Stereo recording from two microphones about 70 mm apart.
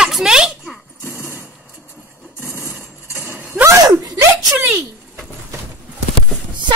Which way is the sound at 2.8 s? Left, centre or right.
Right.